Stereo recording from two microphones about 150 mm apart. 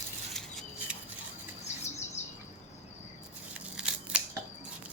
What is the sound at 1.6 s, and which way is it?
Bird, 50° left (ahead or behind).